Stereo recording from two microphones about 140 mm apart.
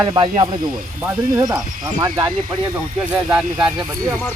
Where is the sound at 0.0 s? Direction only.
35° right (ahead or behind).